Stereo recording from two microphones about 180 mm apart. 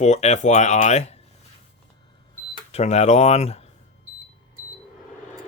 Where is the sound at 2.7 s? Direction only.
40° left (ahead or behind).